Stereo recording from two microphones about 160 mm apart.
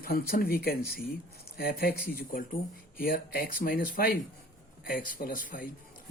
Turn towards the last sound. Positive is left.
turn(degrees=60)  # may be behind; listen again after turning